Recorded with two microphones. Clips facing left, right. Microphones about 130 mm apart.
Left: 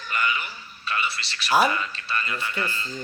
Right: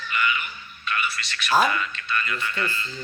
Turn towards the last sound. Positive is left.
turn(degrees=40)  # may be behind; listen again after turning